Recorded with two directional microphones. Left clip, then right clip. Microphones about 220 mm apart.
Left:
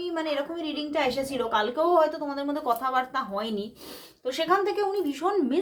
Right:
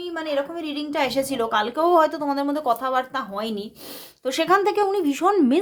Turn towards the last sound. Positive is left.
turn(degrees=-40)  # may be behind; listen again after turning